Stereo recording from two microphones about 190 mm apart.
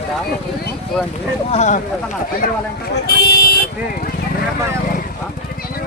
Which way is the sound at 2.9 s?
55° left (ahead or behind).